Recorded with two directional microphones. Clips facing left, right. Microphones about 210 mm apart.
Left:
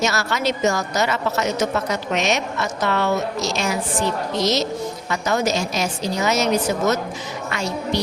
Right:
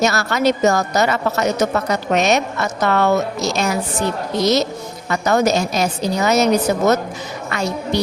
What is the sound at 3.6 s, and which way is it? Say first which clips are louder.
Speech: right 3 dB; 40° right (ahead or behind).